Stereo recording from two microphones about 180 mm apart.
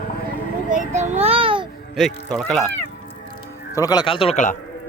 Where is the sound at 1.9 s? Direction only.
Centre (ahead or behind).